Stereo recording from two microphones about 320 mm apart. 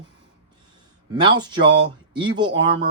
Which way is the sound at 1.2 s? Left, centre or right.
Centre.